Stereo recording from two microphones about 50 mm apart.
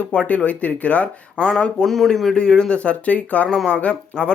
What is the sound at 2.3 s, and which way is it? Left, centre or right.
Speech, centre.